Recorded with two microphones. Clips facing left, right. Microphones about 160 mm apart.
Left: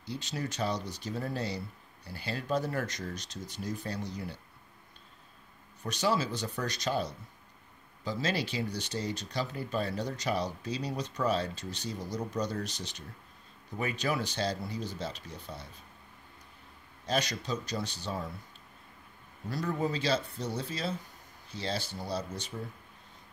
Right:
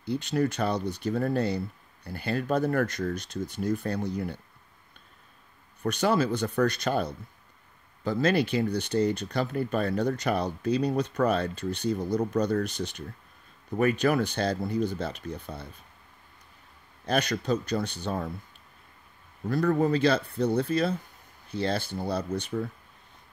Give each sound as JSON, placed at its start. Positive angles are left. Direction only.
{"t": 0.0, "sound": "speech", "side_deg": -55}
{"t": 5.9, "sound": "speech", "side_deg": -55}
{"t": 17.0, "sound": "speech", "side_deg": -55}
{"t": 19.5, "sound": "speech", "side_deg": -55}